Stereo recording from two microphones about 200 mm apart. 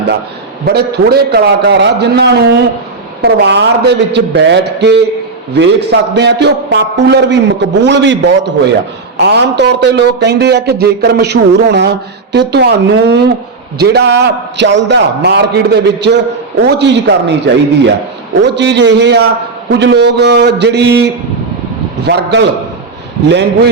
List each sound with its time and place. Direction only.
0.6 s a man's voice: 55° right (ahead or behind)